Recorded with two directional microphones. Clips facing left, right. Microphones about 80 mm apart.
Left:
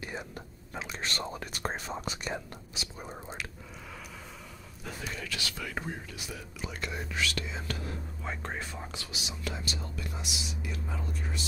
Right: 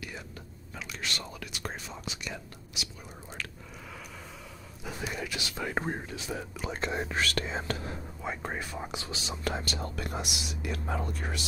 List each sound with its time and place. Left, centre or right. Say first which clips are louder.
0.0 s whispering: left 3 dB; left
4.8 s speech: right 3 dB; centre; by 7.7 s right
8.2 s speech: right 3 dB; centre
9.1 s speech: right 5 dB; right